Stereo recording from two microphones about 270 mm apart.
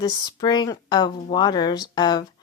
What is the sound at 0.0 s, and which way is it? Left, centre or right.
Speech, centre.